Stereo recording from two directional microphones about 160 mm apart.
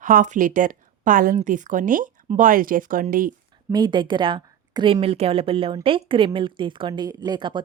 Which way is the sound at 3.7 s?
25° right (ahead or behind).